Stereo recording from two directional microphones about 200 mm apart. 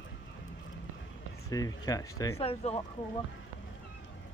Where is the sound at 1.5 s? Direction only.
20° left (ahead or behind).